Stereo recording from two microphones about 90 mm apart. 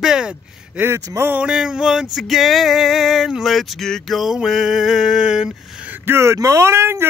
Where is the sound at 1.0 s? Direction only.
35° right (ahead or behind).